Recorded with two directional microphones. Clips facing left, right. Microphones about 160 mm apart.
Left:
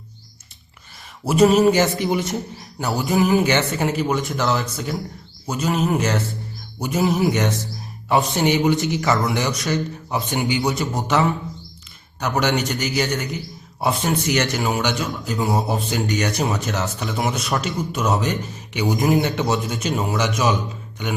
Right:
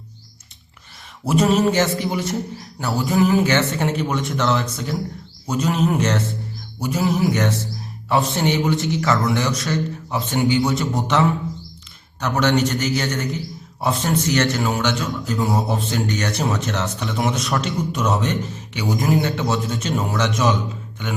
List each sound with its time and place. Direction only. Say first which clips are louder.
1.2 s speech: left 3 dB; 5° left (ahead or behind)
3.8 s a man's voice: left 1 dB; 5° left (ahead or behind)
6.7 s music: left 1 dB; 20° left (ahead or behind)
8.4 s speech: left 2 dB; 15° left (ahead or behind)
10.8 s a man's voice: right 1 dB; centre (ahead or behind)
12.2 s speech: right 2 dB; 15° left (ahead or behind)
15.4 s a man's voice: left 1 dB; centre (ahead or behind)
15.9 s speech: left 1 dB; 10° left (ahead or behind)